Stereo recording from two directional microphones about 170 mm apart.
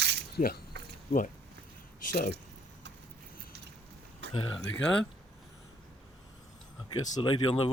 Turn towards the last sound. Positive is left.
turn(degrees=30)  # may be behind; listen again after turning